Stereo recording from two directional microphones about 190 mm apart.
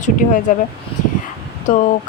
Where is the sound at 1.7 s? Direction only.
40° left (ahead or behind).